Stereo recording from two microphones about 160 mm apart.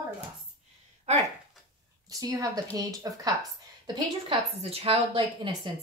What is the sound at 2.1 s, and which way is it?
A woman's voice, 20° right (ahead or behind).